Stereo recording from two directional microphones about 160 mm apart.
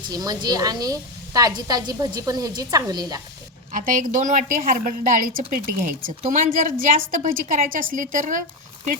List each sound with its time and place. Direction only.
0.1 s a woman's voice: 25° right (ahead or behind)
3.7 s a woman's voice: 55° right (ahead or behind)